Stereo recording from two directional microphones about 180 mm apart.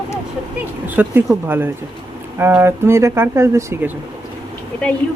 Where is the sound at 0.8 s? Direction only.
10° right (ahead or behind).